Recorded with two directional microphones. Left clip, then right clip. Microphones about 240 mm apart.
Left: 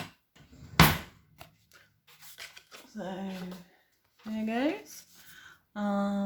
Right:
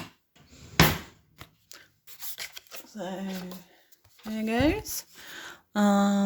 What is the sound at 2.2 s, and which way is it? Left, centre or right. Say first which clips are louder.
Filing: right 7 dB; right.